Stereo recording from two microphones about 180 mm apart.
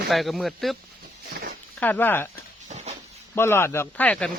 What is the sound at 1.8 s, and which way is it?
Speech, 10° left (ahead or behind).